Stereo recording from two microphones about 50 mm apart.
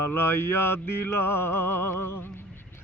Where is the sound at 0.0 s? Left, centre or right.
Left.